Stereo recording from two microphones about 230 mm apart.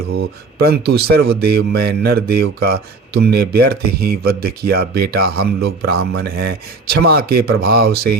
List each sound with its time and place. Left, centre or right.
0.6 s speech: right